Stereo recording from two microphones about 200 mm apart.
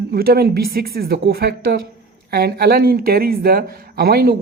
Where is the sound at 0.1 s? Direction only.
50° right (ahead or behind).